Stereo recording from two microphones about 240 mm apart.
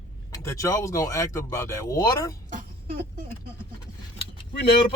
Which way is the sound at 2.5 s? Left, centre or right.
Right.